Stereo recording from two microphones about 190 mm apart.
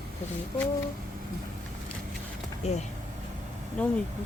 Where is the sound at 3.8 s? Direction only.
5° left (ahead or behind).